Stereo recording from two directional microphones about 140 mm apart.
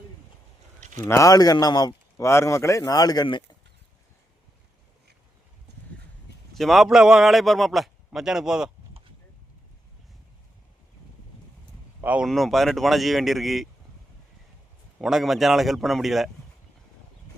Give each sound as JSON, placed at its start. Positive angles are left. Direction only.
{"t": 0.8, "sound": "a sound", "side_deg": -60}
{"t": 1.0, "sound": "speech", "side_deg": 20}
{"t": 6.5, "sound": "a man's voice", "side_deg": 0}
{"t": 12.0, "sound": "speech", "side_deg": -10}
{"t": 12.3, "sound": "a man's voice", "side_deg": 0}
{"t": 15.0, "sound": "a man's voice", "side_deg": 0}